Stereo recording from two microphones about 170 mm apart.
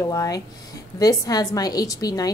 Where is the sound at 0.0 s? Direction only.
20° left (ahead or behind).